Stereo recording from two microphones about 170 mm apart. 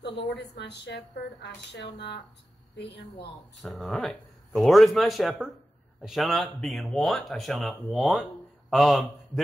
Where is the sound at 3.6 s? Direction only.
Centre (ahead or behind).